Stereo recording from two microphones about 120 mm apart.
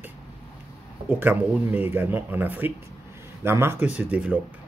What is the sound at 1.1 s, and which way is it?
Speech, 15° right (ahead or behind).